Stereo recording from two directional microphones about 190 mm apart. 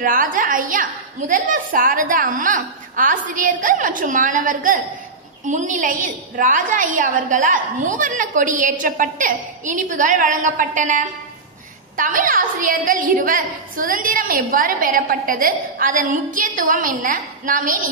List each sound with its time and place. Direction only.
0.0 s a woman's voice: 45° right (ahead or behind)